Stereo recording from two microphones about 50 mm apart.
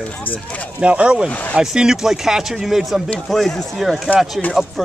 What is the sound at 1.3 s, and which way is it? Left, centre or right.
Speech, left.